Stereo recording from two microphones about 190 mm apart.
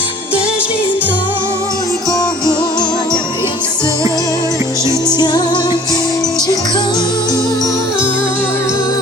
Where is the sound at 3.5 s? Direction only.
20° left (ahead or behind).